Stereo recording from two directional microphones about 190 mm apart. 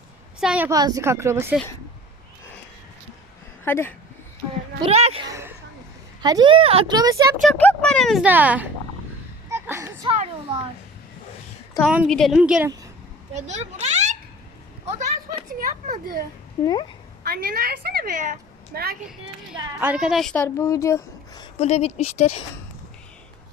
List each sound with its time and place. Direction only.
0.3 s a woman's voice: 5° right (ahead or behind)
0.7 s speech: 20° right (ahead or behind)
3.6 s speech: 10° left (ahead or behind)
4.8 s speech: 35° right (ahead or behind)
5.2 s a sound: 15° right (ahead or behind)
6.2 s speech: 20° right (ahead or behind)
7.4 s speech: 5° left (ahead or behind); by 8.7 s 10° right (ahead or behind)
9.5 s a sound: 15° right (ahead or behind)
10.1 s children playing: 30° right (ahead or behind)
11.9 s speech: centre (ahead or behind)
13.3 s a sound: 35° right (ahead or behind)
17.2 s a woman's voice: 55° right (ahead or behind)
19.8 s a woman's voice: 5° right (ahead or behind); by 21.5 s 20° left (ahead or behind)
21.6 s speech: 35° left (ahead or behind)